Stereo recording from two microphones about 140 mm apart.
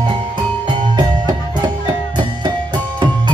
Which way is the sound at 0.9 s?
30° right (ahead or behind).